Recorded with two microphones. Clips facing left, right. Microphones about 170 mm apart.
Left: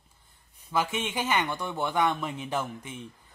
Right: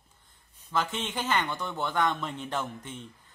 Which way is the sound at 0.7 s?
10° left (ahead or behind).